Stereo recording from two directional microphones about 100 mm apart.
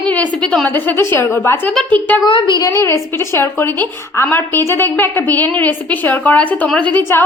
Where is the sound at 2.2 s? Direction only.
55° left (ahead or behind).